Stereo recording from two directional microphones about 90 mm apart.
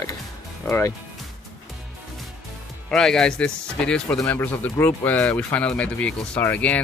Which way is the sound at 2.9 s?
5° left (ahead or behind).